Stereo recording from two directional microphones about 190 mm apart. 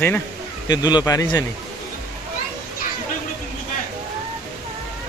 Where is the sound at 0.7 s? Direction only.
20° left (ahead or behind).